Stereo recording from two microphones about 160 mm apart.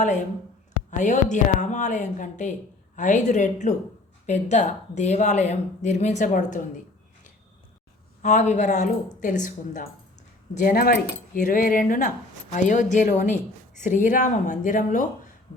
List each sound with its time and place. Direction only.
0.9 s speech: 50° left (ahead or behind)
8.2 s speech: 50° left (ahead or behind)